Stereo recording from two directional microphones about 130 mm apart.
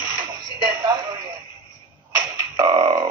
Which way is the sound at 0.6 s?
30° right (ahead or behind).